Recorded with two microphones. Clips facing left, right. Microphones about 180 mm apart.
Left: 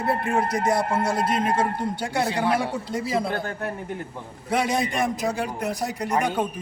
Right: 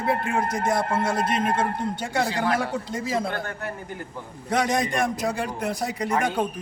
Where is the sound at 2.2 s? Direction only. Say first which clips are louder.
Left 1 dB; 20° left (ahead or behind).